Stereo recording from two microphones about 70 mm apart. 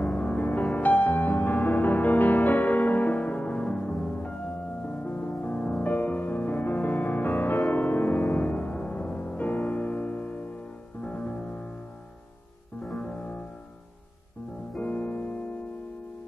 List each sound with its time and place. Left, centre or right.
0.0 s music: left
12.8 s music: centre
14.8 s music: left